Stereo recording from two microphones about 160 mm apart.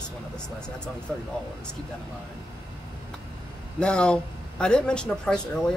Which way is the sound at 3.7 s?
5° left (ahead or behind).